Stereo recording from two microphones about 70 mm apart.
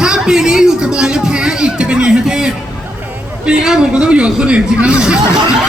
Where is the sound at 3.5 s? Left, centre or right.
Centre.